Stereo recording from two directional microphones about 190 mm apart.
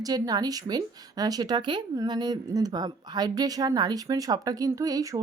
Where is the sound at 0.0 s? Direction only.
20° right (ahead or behind).